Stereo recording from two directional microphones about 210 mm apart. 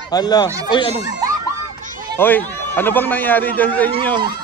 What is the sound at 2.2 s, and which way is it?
A man's voice, 10° left (ahead or behind).